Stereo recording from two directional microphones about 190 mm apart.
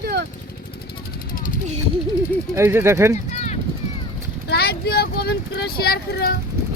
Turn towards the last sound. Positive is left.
turn(degrees=55)  # may be behind; listen again after turning